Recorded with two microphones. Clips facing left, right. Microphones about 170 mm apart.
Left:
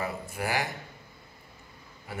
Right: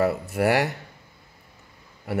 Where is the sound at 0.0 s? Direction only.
70° right (ahead or behind).